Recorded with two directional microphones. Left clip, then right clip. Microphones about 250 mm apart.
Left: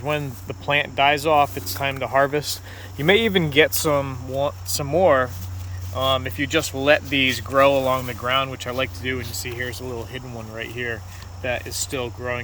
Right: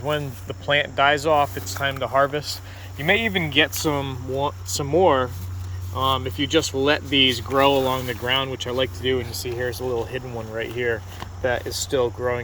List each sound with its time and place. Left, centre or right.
0.0 s speech: centre